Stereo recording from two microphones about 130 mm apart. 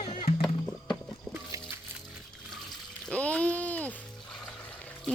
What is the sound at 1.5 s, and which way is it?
Music, 25° right (ahead or behind).